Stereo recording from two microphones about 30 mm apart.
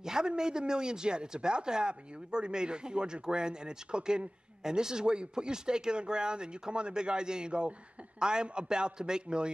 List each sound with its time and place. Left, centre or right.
0.0 s speech: right